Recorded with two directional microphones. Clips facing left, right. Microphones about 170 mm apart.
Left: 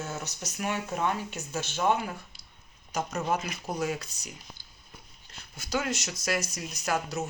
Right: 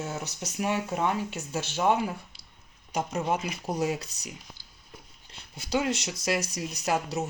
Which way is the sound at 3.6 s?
35° right (ahead or behind).